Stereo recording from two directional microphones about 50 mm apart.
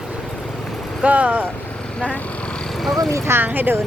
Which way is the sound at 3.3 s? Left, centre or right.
Right.